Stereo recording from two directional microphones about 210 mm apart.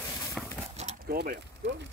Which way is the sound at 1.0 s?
45° right (ahead or behind).